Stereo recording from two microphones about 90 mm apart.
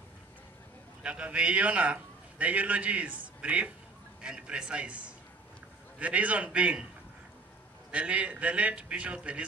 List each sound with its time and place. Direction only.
1.0 s a man's voice: 15° right (ahead or behind)
7.9 s a man's voice: 15° right (ahead or behind)